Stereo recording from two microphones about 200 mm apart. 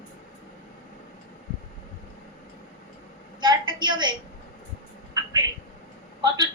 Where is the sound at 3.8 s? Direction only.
20° right (ahead or behind).